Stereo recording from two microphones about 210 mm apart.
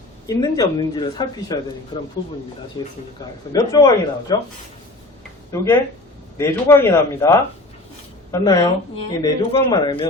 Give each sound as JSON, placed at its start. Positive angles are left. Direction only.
{"t": 0.3, "sound": "a woman's voice", "side_deg": 20}
{"t": 2.8, "sound": "a woman's voice", "side_deg": 20}
{"t": 5.5, "sound": "a woman's voice", "side_deg": 15}